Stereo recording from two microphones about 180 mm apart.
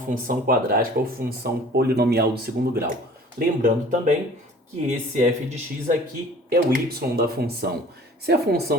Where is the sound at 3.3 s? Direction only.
50° right (ahead or behind).